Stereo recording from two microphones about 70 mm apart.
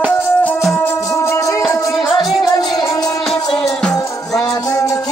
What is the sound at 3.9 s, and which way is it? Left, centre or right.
Music, left.